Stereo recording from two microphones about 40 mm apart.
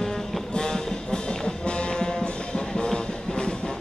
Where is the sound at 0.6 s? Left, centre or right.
Centre.